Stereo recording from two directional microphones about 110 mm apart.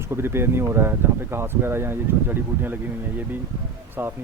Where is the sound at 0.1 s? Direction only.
20° right (ahead or behind).